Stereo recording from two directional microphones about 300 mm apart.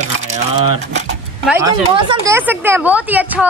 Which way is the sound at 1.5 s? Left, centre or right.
Centre.